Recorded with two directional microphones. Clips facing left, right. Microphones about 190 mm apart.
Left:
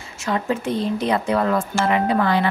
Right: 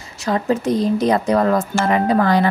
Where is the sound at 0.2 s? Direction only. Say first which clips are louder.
Right 4 dB; 35° right (ahead or behind).